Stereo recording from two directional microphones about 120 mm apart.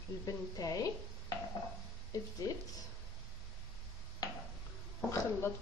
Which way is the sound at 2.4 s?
30° left (ahead or behind).